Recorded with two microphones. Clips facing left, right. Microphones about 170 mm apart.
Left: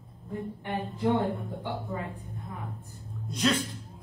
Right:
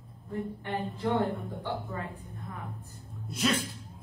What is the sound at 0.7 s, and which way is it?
Speech, 20° left (ahead or behind).